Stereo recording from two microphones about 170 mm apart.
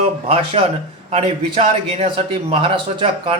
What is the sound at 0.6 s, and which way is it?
Speech, 35° right (ahead or behind).